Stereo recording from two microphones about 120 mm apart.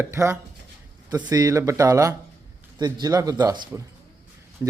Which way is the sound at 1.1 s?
35° right (ahead or behind).